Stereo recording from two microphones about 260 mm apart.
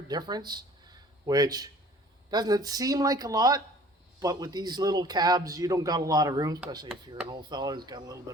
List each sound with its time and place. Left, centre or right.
0.1 s a man's voice: centre